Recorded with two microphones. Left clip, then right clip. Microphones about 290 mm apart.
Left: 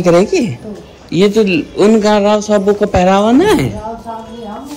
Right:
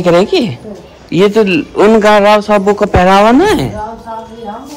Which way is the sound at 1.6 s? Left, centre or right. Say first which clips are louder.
Right 3 dB; right.